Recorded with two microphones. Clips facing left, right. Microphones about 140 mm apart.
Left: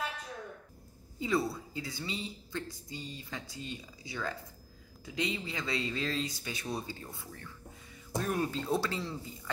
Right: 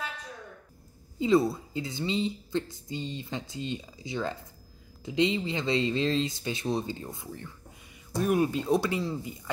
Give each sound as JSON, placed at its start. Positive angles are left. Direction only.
{"t": 1.2, "sound": "speech", "side_deg": -20}